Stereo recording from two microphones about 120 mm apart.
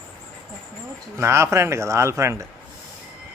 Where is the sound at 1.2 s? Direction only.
20° right (ahead or behind).